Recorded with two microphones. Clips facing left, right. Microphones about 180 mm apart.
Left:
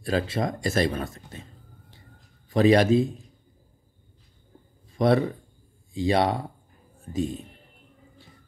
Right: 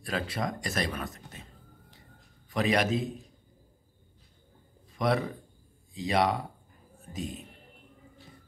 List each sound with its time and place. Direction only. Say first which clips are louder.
0.0 s speech: left 6 dB; 30° left (ahead or behind)
2.5 s a man's voice: left 9 dB; 30° left (ahead or behind)
4.9 s a man's voice: left 7 dB; 30° left (ahead or behind)